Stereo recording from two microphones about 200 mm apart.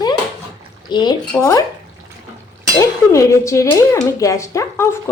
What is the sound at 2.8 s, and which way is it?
Speech, 15° left (ahead or behind).